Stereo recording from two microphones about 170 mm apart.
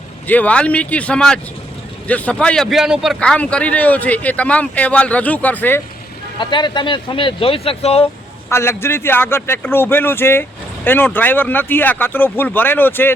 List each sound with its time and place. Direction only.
0.3 s a man's voice: 10° left (ahead or behind)
6.4 s speech: 25° left (ahead or behind)
8.4 s a man's voice: 15° left (ahead or behind)